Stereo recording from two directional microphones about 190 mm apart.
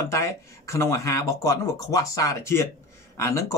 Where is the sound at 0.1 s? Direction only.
15° left (ahead or behind).